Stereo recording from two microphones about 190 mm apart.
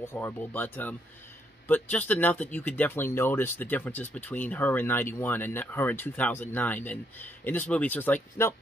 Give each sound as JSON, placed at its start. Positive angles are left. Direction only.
{"t": 0.0, "sound": "speech", "side_deg": 10}